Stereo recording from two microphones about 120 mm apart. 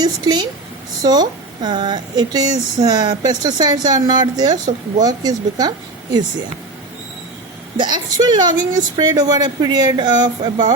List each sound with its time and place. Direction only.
0.0 s a woman's voice: 35° right (ahead or behind)
7.8 s speech: 35° right (ahead or behind)